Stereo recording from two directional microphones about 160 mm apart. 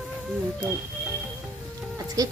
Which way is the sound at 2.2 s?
25° right (ahead or behind).